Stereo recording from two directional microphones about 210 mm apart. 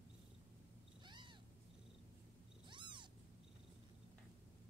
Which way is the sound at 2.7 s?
20° right (ahead or behind).